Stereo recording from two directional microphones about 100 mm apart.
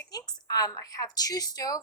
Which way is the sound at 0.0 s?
40° left (ahead or behind).